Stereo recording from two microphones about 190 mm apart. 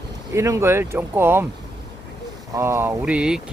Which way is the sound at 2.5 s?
15° right (ahead or behind).